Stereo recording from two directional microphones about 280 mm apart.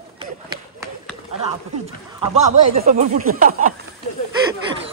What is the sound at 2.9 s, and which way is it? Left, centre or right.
Speech, right.